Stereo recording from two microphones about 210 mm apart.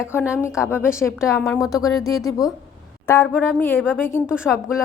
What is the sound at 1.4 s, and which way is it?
Speech, centre (ahead or behind).